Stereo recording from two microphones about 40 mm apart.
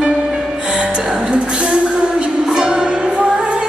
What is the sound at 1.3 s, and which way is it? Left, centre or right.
Music, right.